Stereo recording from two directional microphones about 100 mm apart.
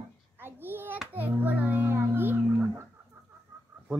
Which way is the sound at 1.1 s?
20° right (ahead or behind).